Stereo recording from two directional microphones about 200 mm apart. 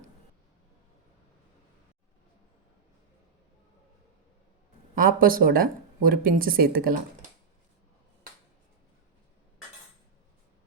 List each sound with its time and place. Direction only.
4.9 s speech: 45° right (ahead or behind)